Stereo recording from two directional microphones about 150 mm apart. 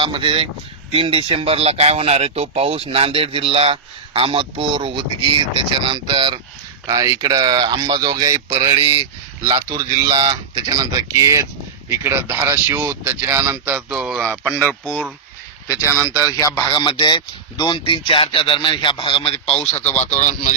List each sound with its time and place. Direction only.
0.0 s speech: 35° right (ahead or behind)
6.8 s speech: 25° right (ahead or behind)
8.5 s speech: 40° right (ahead or behind)
9.6 s speech: 25° right (ahead or behind)
10.1 s speech: 35° right (ahead or behind)
10.7 s speech: 25° right (ahead or behind); by 14.3 s 5° right (ahead or behind)
14.4 s speech: 10° left (ahead or behind)
15.9 s speech: 20° left (ahead or behind); by 20.5 s 55° left (ahead or behind)